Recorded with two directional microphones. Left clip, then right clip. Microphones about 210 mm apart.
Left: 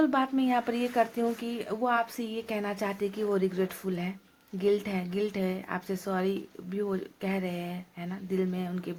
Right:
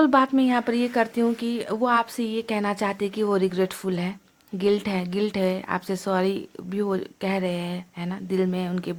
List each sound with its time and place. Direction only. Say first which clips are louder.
0.0 s speech: right 8 dB; 45° right (ahead or behind)